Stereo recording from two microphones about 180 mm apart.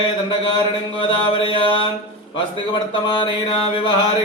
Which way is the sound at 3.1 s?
30° left (ahead or behind).